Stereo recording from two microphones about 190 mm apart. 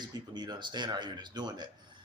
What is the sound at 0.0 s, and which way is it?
A man's voice, 20° right (ahead or behind).